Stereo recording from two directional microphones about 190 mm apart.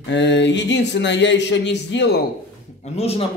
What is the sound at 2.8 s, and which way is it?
Speech, 35° left (ahead or behind).